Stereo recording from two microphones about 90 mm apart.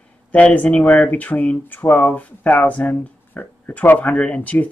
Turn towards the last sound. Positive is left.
turn(degrees=15)  # may be behind; listen again after turning